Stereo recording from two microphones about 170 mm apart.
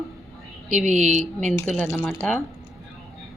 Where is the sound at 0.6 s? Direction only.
45° right (ahead or behind).